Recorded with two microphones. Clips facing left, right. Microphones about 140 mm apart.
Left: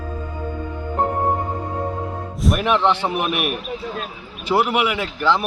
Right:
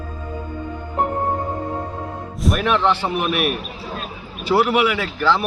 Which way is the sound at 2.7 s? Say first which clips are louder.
Even; 20° left (ahead or behind).